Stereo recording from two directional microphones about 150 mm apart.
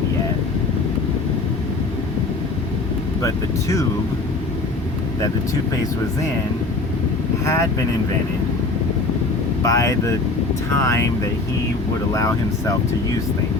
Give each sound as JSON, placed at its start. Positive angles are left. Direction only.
{"t": 3.2, "sound": "speech", "side_deg": 20}
{"t": 7.4, "sound": "speech", "side_deg": 20}
{"t": 9.6, "sound": "speech", "side_deg": 20}